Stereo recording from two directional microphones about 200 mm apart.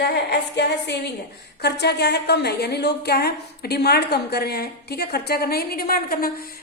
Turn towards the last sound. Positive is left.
turn(degrees=45)  # may be behind; listen again after turning